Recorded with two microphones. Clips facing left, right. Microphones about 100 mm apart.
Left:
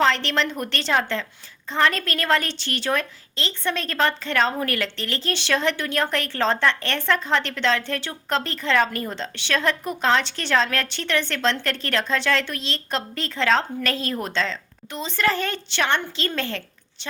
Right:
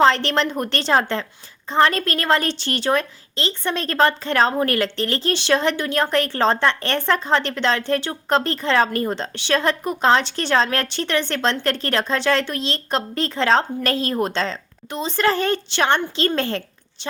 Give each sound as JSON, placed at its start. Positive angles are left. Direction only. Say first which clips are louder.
{"t": 0.0, "sound": "a woman's voice", "louder": "right 4 dB", "side_deg": -35}